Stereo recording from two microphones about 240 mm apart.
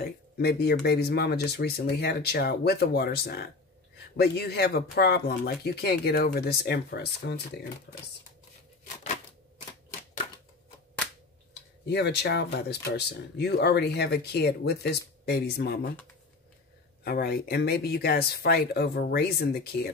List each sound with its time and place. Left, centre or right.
0.0 s speech: left
11.8 s speech: left
17.0 s speech: left